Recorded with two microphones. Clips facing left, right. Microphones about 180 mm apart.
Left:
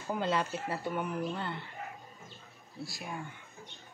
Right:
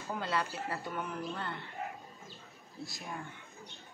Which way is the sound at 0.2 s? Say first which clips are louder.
Left 3 dB; 15° left (ahead or behind).